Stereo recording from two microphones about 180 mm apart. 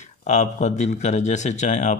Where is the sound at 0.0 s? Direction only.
40° left (ahead or behind).